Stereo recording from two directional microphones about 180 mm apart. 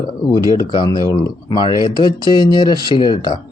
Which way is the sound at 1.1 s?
25° left (ahead or behind).